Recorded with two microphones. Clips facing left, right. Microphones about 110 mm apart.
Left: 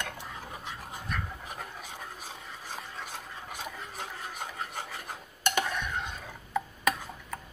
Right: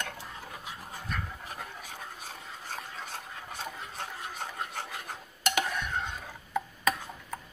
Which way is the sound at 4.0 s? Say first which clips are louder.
Right 1 dB; 10° left (ahead or behind).